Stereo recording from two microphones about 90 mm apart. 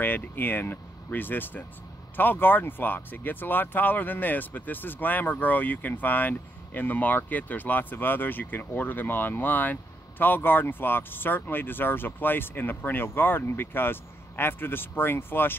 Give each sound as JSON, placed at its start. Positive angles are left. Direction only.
{"t": 0.0, "sound": "speech", "side_deg": 25}